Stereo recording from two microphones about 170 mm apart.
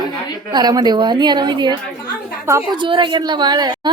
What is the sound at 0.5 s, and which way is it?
A woman's voice, 25° right (ahead or behind).